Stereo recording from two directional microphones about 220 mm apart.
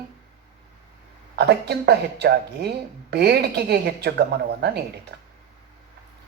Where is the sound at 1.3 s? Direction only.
45° right (ahead or behind).